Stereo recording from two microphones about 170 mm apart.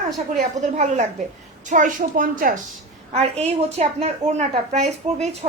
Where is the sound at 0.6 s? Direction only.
45° right (ahead or behind).